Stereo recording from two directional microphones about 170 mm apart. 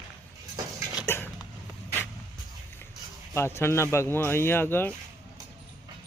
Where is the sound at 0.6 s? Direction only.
20° right (ahead or behind).